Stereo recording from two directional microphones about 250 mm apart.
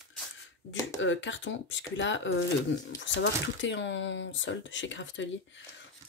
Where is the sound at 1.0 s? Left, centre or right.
Left.